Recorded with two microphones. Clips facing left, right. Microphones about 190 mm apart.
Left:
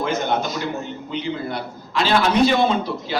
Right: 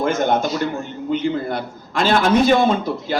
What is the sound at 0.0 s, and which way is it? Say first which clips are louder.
A man's voice: right 4 dB; 50° right (ahead or behind).